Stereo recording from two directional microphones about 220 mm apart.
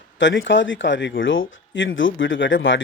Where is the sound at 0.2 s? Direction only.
55° left (ahead or behind).